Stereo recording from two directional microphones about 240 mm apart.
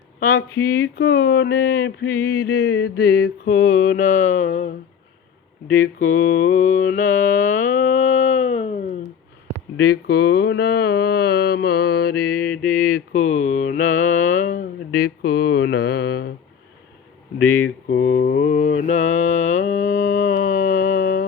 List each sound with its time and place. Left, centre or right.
0.2 s speech: left
0.6 s mantra: left
5.7 s mantra: left
7.9 s a sound: left
9.7 s a sound: left
13.6 s mantra: left
17.3 s mantra: left